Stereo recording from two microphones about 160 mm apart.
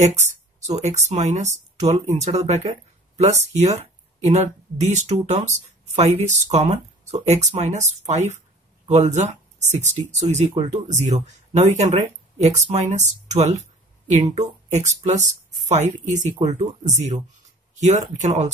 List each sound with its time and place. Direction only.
0.0 s speech: 45° right (ahead or behind)